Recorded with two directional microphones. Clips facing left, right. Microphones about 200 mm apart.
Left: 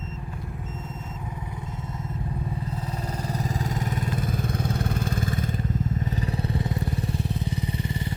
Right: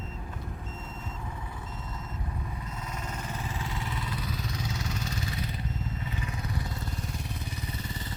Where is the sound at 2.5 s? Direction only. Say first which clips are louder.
Left 7 dB; 35° left (ahead or behind).